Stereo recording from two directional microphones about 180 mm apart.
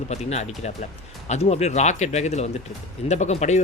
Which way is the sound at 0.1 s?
40° left (ahead or behind).